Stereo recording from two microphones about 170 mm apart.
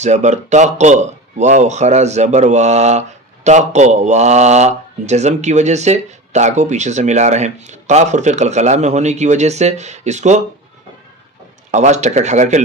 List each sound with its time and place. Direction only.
0.0 s speech: 45° right (ahead or behind)
11.7 s speech: 45° right (ahead or behind)